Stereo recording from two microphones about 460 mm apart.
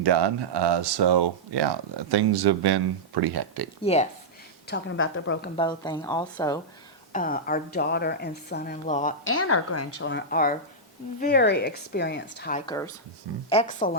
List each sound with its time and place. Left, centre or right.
0.0 s speech: right
4.7 s speech: left
5.5 s a woman's voice: centre
9.3 s a woman's voice: left